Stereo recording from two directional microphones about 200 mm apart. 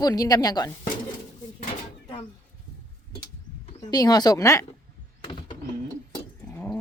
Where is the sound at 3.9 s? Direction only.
20° left (ahead or behind).